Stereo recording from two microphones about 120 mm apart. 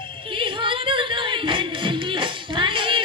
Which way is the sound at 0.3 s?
45° right (ahead or behind).